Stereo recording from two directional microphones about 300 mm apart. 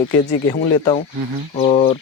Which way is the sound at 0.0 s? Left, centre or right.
Centre.